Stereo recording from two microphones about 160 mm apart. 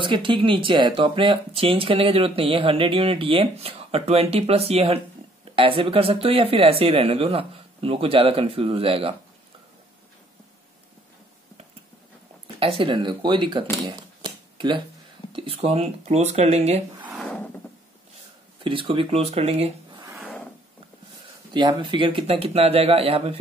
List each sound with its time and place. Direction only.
0.0 s speech: 30° right (ahead or behind)
12.5 s speech: 35° right (ahead or behind)
13.8 s a sound: 30° right (ahead or behind)
15.3 s speech: 35° right (ahead or behind)
17.1 s wood: 5° left (ahead or behind)
18.6 s speech: 35° right (ahead or behind)
20.0 s wood: 20° right (ahead or behind)
21.5 s speech: 30° right (ahead or behind)